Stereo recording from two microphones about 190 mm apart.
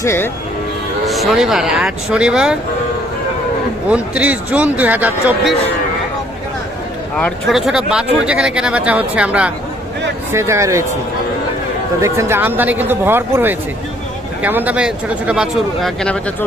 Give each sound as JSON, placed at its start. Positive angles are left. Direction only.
{"t": 0.0, "sound": "speech", "side_deg": 15}
{"t": 1.0, "sound": "speech", "side_deg": 0}
{"t": 3.8, "sound": "speech", "side_deg": -5}
{"t": 7.2, "sound": "speech", "side_deg": 5}
{"t": 12.0, "sound": "speech", "side_deg": -15}